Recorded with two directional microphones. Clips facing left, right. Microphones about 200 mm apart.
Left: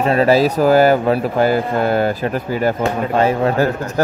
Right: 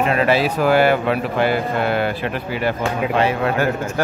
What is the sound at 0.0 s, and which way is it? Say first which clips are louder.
Speech: left 4 dB; 35° left (ahead or behind).